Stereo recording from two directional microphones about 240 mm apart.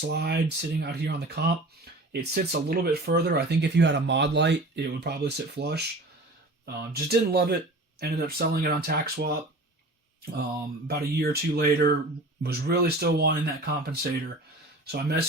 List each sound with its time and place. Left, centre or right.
0.1 s speech: right
10.8 s speech: right